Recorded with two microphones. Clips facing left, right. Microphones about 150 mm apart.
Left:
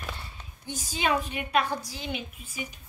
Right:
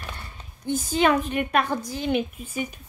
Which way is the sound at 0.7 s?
55° right (ahead or behind).